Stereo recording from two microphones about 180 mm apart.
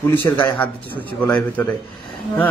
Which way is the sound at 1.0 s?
5° left (ahead or behind).